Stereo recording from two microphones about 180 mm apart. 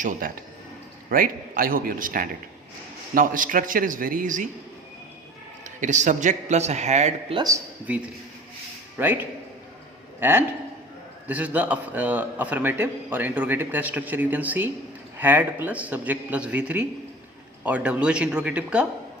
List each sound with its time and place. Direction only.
0.0 s a man's voice: 45° right (ahead or behind)
5.6 s speech: 45° right (ahead or behind)
7.3 s speech: 20° right (ahead or behind)
7.9 s a man's voice: 10° right (ahead or behind)